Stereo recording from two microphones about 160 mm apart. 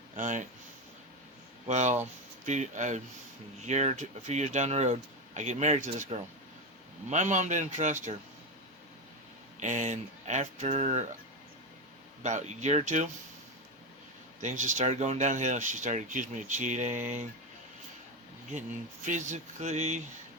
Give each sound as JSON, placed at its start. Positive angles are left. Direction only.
{"t": 0.2, "sound": "speech", "side_deg": -50}
{"t": 1.6, "sound": "speech", "side_deg": -45}
{"t": 9.6, "sound": "speech", "side_deg": -50}
{"t": 12.2, "sound": "speech", "side_deg": -50}
{"t": 14.4, "sound": "speech", "side_deg": -50}
{"t": 19.0, "sound": "speech", "side_deg": -50}